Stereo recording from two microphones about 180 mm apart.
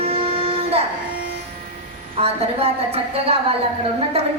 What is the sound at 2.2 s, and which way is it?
A woman's voice, 35° right (ahead or behind).